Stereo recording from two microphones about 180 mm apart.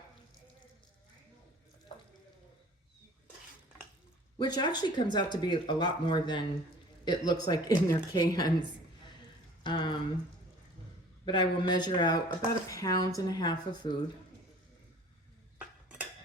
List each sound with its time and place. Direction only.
4.4 s speech: 20° left (ahead or behind)
9.6 s a sound: 25° left (ahead or behind)
11.3 s speech: 25° left (ahead or behind)